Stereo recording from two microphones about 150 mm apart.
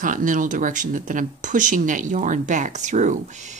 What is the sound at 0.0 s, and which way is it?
Speech, 60° right (ahead or behind).